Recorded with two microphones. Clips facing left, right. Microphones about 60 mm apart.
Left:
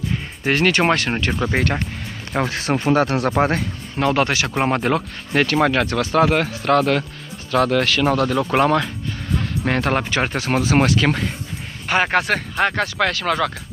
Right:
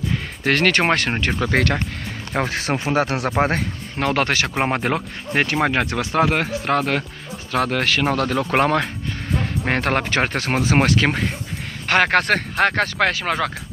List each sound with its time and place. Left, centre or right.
0.4 s speech: right
0.7 s speech: right
1.5 s speech: right
2.3 s speech: right
2.7 s speech: centre
3.3 s speech: right
4.6 s speech: right
10.5 s speech: right
11.9 s speech: right
13.1 s speech: right